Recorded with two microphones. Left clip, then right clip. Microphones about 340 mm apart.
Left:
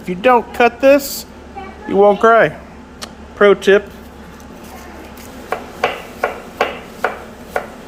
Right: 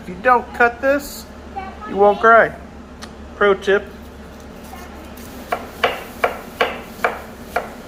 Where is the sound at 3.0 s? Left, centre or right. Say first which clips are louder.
Left 5 dB; left.